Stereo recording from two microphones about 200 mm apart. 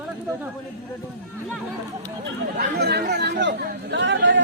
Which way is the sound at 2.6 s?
50° right (ahead or behind).